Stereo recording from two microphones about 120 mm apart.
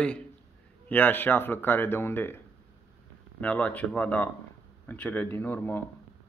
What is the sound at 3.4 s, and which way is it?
A man's voice, 10° left (ahead or behind).